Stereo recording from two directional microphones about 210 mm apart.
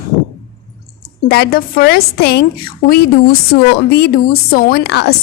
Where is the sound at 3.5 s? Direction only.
50° left (ahead or behind).